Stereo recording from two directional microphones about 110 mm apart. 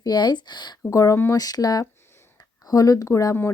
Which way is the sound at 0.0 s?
40° left (ahead or behind).